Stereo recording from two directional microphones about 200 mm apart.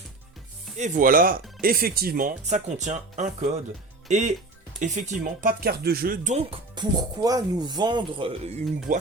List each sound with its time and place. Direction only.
0.8 s speech: 40° right (ahead or behind)
4.8 s speech: 40° right (ahead or behind)
6.3 s speech: 20° right (ahead or behind)